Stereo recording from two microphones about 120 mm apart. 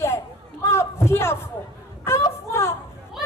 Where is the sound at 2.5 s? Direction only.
25° left (ahead or behind).